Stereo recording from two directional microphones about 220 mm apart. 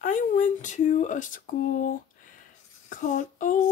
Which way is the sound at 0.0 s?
35° left (ahead or behind).